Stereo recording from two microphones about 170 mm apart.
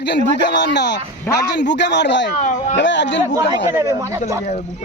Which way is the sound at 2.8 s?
90° left.